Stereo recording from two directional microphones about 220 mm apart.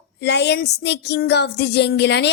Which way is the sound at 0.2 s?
50° left (ahead or behind).